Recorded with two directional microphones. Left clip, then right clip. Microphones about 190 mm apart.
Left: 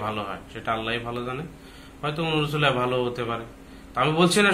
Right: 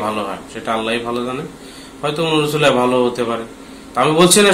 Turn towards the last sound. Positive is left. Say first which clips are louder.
# right 9 dB
turn(degrees=-5)  # may be behind; listen again after turning